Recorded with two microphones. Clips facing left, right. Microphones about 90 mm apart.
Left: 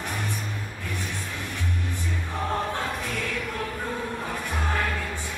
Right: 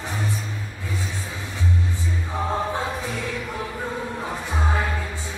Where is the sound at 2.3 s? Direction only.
15° right (ahead or behind).